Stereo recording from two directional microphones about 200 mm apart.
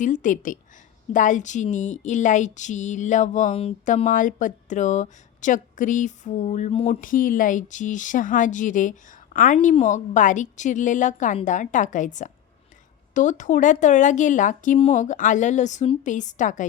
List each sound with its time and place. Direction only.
0.0 s speech: 40° left (ahead or behind)